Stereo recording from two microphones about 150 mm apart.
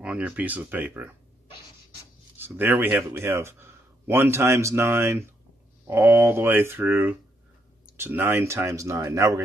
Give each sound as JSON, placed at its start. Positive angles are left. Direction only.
{"t": 0.0, "sound": "speech", "side_deg": -10}
{"t": 2.3, "sound": "a man's voice", "side_deg": -15}